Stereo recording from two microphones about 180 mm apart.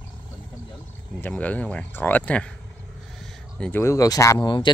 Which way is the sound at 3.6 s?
15° left (ahead or behind).